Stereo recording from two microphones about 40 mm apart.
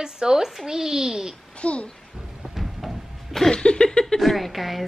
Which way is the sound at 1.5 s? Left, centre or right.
Left.